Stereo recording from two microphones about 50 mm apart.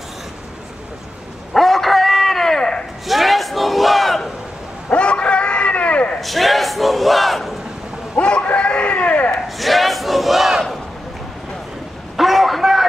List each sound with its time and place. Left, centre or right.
1.5 s chicken: centre
3.1 s battle cry: centre
4.9 s a sound: left
6.1 s battle cry: centre
8.2 s chicken: left
9.6 s battle cry: centre
12.1 s a sound: centre